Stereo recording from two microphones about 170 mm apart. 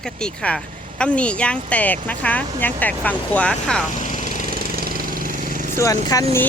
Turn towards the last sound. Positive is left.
turn(degrees=20)  # may be behind; listen again after turning